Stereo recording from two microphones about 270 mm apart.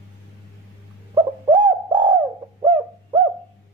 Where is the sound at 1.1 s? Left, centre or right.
Centre.